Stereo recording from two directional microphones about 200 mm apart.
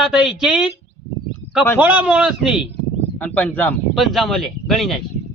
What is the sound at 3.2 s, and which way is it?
A man's voice, 10° left (ahead or behind).